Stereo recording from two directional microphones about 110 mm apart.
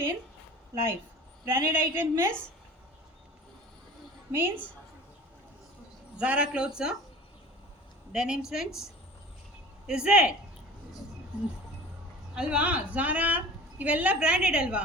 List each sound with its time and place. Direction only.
1.5 s a woman's voice: 20° right (ahead or behind)
4.3 s a woman's voice: 20° right (ahead or behind)
6.1 s a woman's voice: 10° right (ahead or behind)
8.1 s a woman's voice: 5° right (ahead or behind)
12.3 s a woman's voice: 10° right (ahead or behind)